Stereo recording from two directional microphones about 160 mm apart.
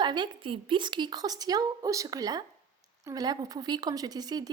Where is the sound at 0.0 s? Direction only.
30° right (ahead or behind).